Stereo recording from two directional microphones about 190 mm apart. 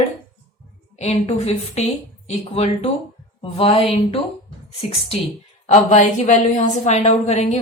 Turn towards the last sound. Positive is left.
turn(degrees=35)  # may be behind; listen again after turning